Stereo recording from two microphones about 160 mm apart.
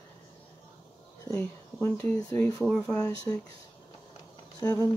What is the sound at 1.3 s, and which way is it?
Speech, 10° left (ahead or behind).